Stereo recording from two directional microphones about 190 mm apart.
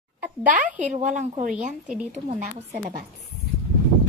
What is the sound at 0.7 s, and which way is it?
A woman's voice, 40° right (ahead or behind).